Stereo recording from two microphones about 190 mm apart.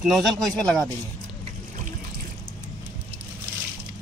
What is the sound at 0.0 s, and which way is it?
Speech, centre (ahead or behind).